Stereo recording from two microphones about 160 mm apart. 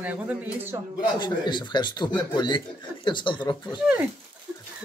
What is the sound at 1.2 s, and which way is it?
Speech, 30° left (ahead or behind).